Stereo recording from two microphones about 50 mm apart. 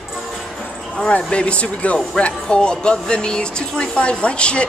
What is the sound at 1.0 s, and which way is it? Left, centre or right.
Speech, left.